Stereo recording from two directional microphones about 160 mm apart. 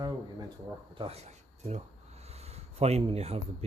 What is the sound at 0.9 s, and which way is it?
Speech, 35° right (ahead or behind).